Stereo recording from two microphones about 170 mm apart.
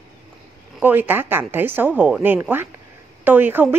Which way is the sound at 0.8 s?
10° right (ahead or behind).